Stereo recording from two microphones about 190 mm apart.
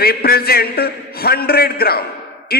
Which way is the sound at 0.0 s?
55° left (ahead or behind).